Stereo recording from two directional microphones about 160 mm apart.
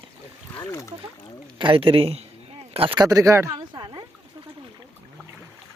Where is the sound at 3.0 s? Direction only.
20° right (ahead or behind).